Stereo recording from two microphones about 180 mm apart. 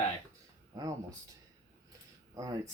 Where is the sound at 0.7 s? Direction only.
20° right (ahead or behind).